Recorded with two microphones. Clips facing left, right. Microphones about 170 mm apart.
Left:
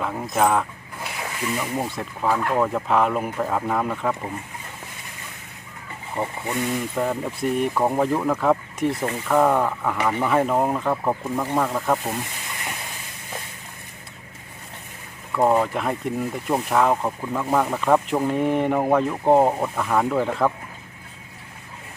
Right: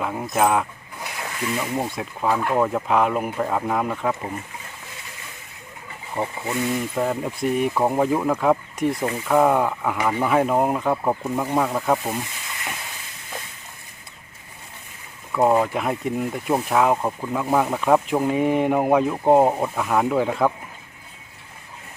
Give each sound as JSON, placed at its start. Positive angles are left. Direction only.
{"t": 0.0, "sound": "a sound", "side_deg": -5}
{"t": 1.5, "sound": "speech", "side_deg": -5}
{"t": 6.5, "sound": "speech", "side_deg": 0}
{"t": 15.3, "sound": "speech", "side_deg": -5}